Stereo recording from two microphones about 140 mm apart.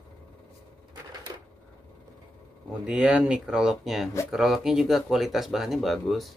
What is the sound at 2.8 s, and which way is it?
Speech, 5° right (ahead or behind).